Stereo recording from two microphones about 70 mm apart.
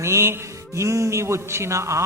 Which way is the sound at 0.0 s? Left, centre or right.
Right.